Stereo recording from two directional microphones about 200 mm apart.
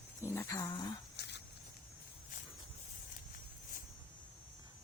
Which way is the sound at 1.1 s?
55° left (ahead or behind).